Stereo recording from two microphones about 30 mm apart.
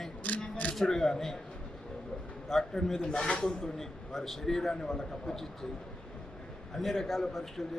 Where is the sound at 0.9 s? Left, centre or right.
Centre.